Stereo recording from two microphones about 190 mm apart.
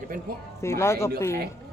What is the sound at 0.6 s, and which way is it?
Speech, 15° left (ahead or behind).